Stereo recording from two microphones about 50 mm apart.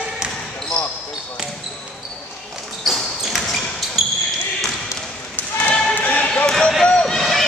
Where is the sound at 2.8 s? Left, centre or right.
Centre.